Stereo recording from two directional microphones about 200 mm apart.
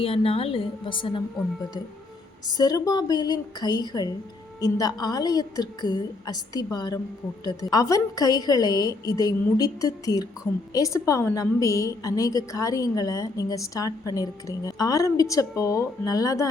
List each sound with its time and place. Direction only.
0.0 s a woman's voice: 30° left (ahead or behind)
2.5 s a woman's voice: 20° left (ahead or behind)